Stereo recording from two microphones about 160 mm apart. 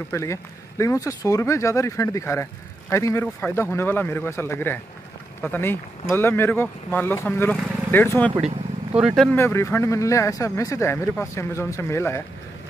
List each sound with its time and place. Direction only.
0.1 s speech: 20° left (ahead or behind)
8.9 s speech: centre (ahead or behind)
9.4 s speech: 15° left (ahead or behind)